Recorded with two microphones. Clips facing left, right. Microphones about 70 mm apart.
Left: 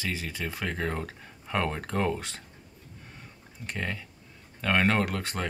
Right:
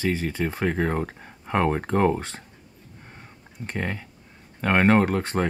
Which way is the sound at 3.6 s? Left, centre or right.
Right.